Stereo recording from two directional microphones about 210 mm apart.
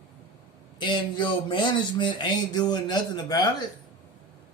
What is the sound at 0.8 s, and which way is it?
Speech, 20° left (ahead or behind).